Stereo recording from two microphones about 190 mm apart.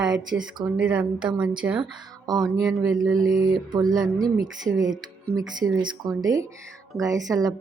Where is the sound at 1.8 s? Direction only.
20° right (ahead or behind).